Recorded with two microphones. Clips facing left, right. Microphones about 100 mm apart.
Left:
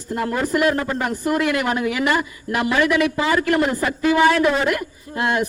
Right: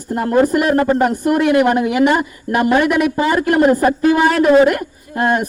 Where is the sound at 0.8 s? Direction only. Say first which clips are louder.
Right 9 dB; 35° right (ahead or behind).